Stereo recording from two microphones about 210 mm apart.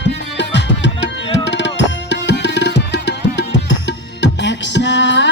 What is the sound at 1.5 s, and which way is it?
Tabla, 60° left (ahead or behind).